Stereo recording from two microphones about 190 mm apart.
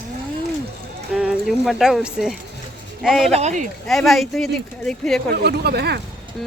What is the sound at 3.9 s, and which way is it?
Speech, centre (ahead or behind).